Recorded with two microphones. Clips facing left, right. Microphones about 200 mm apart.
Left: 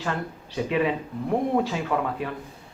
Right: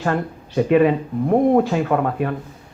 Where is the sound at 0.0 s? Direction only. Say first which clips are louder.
Right 8 dB; 55° right (ahead or behind).